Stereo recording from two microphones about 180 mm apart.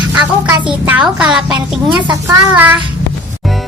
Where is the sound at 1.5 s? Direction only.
25° right (ahead or behind).